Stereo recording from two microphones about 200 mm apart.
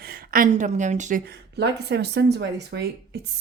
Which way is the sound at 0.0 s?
45° right (ahead or behind).